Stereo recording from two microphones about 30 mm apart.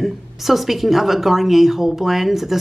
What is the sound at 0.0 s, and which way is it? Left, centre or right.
A woman's voice, centre.